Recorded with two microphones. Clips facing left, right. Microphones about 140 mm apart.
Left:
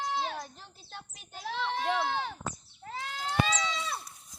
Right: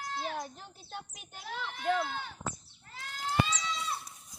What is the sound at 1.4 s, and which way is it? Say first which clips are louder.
Speech: left 2 dB; 90° left.